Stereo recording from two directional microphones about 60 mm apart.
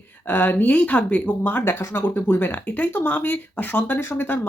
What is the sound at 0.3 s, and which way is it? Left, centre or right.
Speech, left.